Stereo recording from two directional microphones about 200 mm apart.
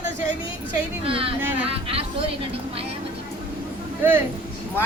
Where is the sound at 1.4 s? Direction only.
10° right (ahead or behind).